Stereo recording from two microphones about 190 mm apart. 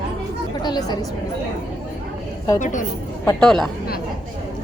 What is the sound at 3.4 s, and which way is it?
Speech, centre (ahead or behind).